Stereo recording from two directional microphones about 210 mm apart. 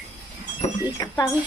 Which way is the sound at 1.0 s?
20° left (ahead or behind).